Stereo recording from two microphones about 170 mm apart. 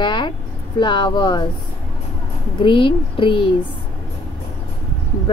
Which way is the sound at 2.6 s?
30° left (ahead or behind).